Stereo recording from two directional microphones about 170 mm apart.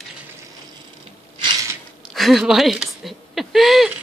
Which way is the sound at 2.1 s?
Centre (ahead or behind).